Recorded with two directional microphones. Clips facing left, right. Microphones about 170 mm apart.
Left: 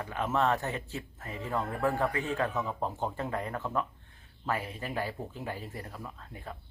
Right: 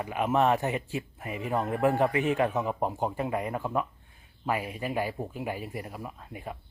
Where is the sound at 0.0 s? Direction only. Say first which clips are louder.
Right 4 dB; 15° right (ahead or behind).